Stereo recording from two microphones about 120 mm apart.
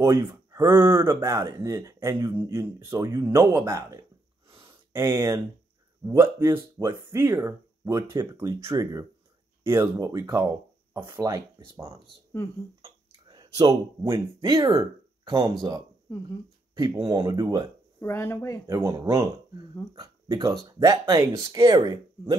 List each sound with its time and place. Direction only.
0.0 s speech: 20° right (ahead or behind)
4.6 s a sound: 20° right (ahead or behind)
6.0 s speech: 20° right (ahead or behind)
12.8 s a sound: 35° right (ahead or behind)
14.5 s speech: 40° right (ahead or behind)
17.2 s speech: 30° right (ahead or behind)
18.0 s speech: 20° left (ahead or behind)
18.7 s speech: 25° right (ahead or behind)